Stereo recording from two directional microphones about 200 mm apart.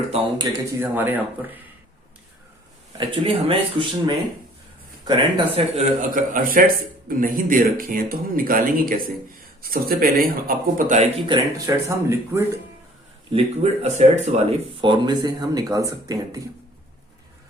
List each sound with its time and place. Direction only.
0.1 s speech: 20° right (ahead or behind)
3.0 s a man's voice: 25° right (ahead or behind)
11.3 s speech: 15° right (ahead or behind)
13.3 s speech: 35° right (ahead or behind); by 16.4 s 20° right (ahead or behind)